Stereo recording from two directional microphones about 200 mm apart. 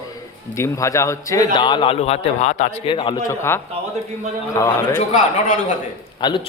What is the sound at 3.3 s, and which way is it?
A man's voice, 10° left (ahead or behind).